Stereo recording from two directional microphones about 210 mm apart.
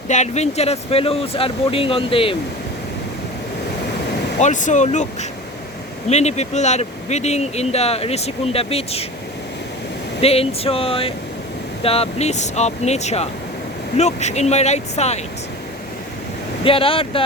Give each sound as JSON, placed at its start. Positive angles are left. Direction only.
{"t": 0.1, "sound": "speech", "side_deg": 30}
{"t": 4.4, "sound": "speech", "side_deg": 35}
{"t": 6.1, "sound": "speech", "side_deg": 30}
{"t": 10.2, "sound": "speech", "side_deg": 30}
{"t": 16.6, "sound": "speech", "side_deg": 25}